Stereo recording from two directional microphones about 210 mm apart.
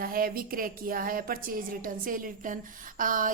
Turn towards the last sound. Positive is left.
turn(degrees=-40)  # may be behind; listen again after turning